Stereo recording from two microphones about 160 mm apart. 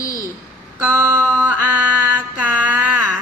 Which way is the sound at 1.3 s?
10° right (ahead or behind).